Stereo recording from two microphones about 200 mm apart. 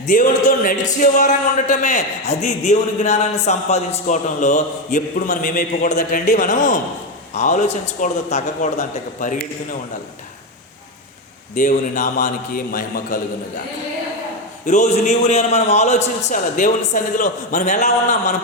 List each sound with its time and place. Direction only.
0.1 s speech: 40° left (ahead or behind)
11.5 s a man's voice: 40° left (ahead or behind)
14.7 s speech: 35° left (ahead or behind)